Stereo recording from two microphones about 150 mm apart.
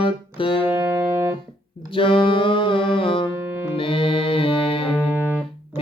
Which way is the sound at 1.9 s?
35° left (ahead or behind).